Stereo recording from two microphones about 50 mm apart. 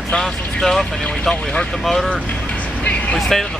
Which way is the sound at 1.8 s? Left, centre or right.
Centre.